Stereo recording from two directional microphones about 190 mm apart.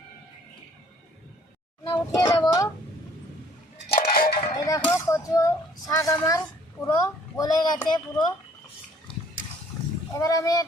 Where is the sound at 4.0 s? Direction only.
50° left (ahead or behind).